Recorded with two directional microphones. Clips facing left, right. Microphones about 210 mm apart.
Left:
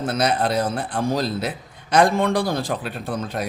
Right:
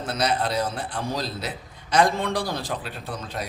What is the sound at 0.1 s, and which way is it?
A man's voice, 55° left (ahead or behind).